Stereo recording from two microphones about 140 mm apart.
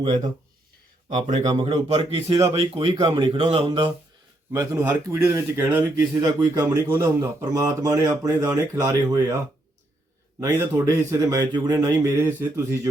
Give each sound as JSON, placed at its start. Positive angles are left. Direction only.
{"t": 0.0, "sound": "speech", "side_deg": -35}
{"t": 1.5, "sound": "speech", "side_deg": -35}
{"t": 1.7, "sound": "speech", "side_deg": -45}
{"t": 4.5, "sound": "speech", "side_deg": -20}
{"t": 6.2, "sound": "speech", "side_deg": -30}
{"t": 6.9, "sound": "speech", "side_deg": -20}
{"t": 10.4, "sound": "speech", "side_deg": -25}